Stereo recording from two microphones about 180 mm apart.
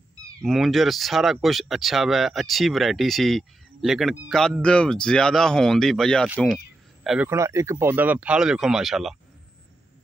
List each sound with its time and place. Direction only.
0.4 s speech: centre (ahead or behind)
6.4 s a sound: centre (ahead or behind)
7.2 s speech: 15° right (ahead or behind)